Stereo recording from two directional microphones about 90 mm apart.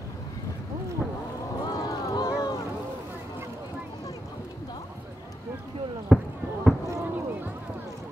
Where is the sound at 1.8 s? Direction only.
40° left (ahead or behind).